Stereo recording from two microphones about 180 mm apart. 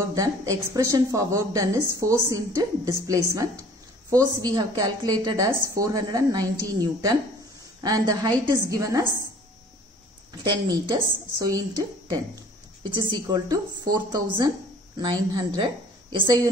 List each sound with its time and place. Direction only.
0.7 s a woman's voice: 15° right (ahead or behind)
10.7 s a woman's voice: 20° right (ahead or behind)